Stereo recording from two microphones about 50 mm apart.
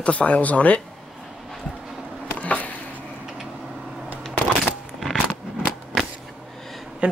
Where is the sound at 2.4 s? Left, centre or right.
Left.